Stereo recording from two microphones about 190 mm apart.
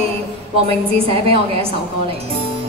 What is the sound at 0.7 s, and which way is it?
A woman's voice, 30° right (ahead or behind).